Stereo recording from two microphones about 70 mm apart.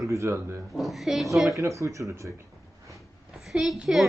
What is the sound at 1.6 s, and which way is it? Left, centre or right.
Speech, right.